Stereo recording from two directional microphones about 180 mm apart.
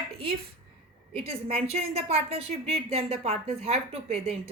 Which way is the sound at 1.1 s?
35° right (ahead or behind).